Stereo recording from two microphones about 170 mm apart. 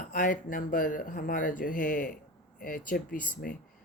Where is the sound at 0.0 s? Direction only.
55° left (ahead or behind).